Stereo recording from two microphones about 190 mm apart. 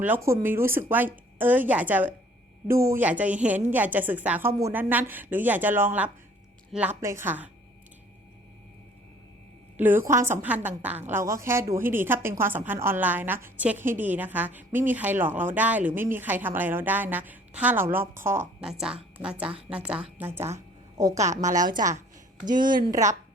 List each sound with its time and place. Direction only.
0.0 s a woman's voice: 10° right (ahead or behind)
9.7 s a woman's voice: 10° right (ahead or behind)
21.0 s a woman's voice: 40° right (ahead or behind)